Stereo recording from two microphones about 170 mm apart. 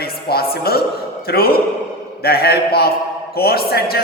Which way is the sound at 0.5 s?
65° left (ahead or behind).